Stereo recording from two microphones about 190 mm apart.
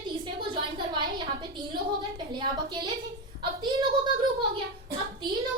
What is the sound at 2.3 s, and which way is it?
A woman's voice, 25° right (ahead or behind).